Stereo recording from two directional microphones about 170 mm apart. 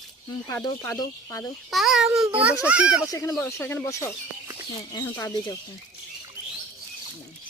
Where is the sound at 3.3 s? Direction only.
10° left (ahead or behind).